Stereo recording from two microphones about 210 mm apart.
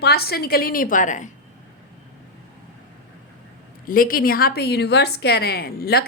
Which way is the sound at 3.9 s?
45° left (ahead or behind).